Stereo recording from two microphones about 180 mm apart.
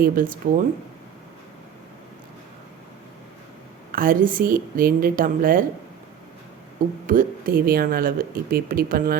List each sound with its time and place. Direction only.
0.0 s speech: 50° right (ahead or behind)
3.9 s speech: 50° right (ahead or behind)
7.1 s speech: 50° right (ahead or behind)